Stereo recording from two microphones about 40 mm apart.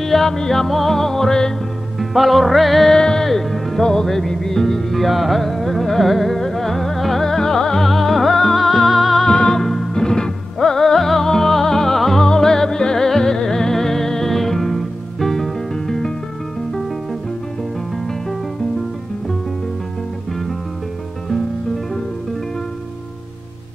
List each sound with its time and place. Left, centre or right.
0.0 s music: centre
2.0 s music: centre
2.9 s music: centre
3.3 s music: centre
3.8 s music: centre
9.2 s music: centre